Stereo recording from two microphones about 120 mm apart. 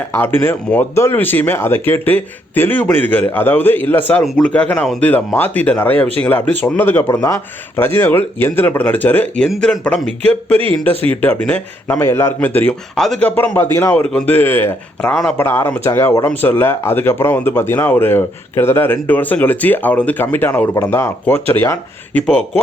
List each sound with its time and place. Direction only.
0.2 s a man's voice: 15° left (ahead or behind)
13.0 s speech: 5° left (ahead or behind); by 15.1 s 20° left (ahead or behind)
15.1 s speech: 5° left (ahead or behind)
15.4 s a man's voice: 20° left (ahead or behind)